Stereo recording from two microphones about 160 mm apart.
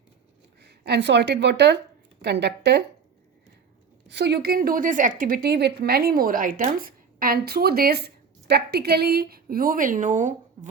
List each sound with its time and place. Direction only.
0.6 s a woman's voice: 90° right
4.1 s a woman's voice: 90° right; by 10.7 s 50° right (ahead or behind)